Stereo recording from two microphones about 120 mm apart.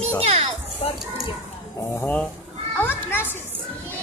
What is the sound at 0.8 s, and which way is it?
Music, 50° left (ahead or behind).